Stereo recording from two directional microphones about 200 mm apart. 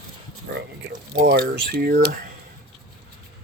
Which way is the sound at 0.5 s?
60° right (ahead or behind).